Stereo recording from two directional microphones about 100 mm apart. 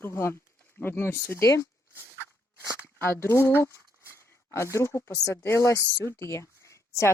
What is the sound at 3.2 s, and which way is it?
Speech, 25° left (ahead or behind).